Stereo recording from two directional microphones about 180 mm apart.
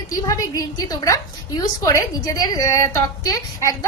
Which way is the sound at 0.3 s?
20° left (ahead or behind).